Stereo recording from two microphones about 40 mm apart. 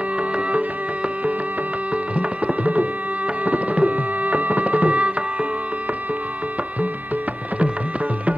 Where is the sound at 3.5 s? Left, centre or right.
Right.